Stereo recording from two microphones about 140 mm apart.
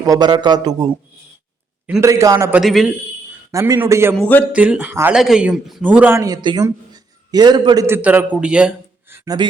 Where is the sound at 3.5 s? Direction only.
20° right (ahead or behind).